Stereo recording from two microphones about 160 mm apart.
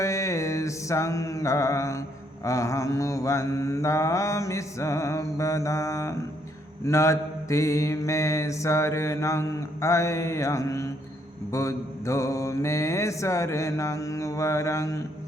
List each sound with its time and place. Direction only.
0.0 s mantra: 20° left (ahead or behind)